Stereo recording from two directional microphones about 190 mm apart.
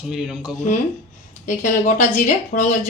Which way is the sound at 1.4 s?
40° left (ahead or behind).